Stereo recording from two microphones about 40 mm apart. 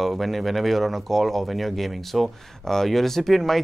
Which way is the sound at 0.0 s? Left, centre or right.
Centre.